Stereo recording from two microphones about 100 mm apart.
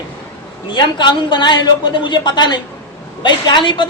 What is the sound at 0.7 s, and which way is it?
A woman's voice, 50° left (ahead or behind).